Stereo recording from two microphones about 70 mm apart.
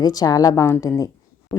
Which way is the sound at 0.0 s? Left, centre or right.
Left.